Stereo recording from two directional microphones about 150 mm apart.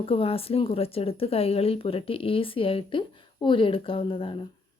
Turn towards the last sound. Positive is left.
turn(degrees=35)  # may be behind; listen again after turning